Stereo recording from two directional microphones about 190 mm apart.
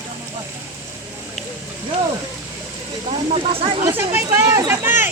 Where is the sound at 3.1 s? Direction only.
30° right (ahead or behind).